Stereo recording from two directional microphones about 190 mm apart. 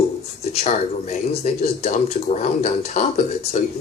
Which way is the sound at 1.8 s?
35° left (ahead or behind).